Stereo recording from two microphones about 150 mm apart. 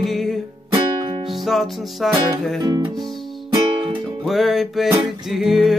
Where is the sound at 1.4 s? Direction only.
Centre (ahead or behind).